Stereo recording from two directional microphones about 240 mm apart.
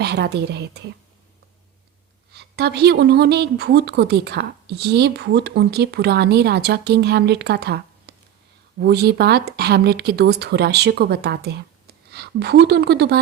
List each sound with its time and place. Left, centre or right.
0.0 s a woman's voice: right
2.3 s a woman's voice: right